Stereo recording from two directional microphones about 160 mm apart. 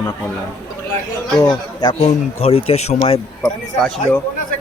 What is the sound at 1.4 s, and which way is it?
A man's voice, 30° left (ahead or behind).